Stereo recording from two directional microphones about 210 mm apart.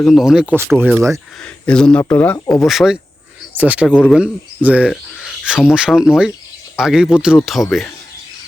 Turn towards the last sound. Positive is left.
turn(degrees=0)  # may be behind; listen again after turning